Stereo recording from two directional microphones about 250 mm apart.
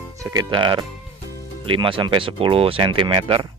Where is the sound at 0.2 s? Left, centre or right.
Centre.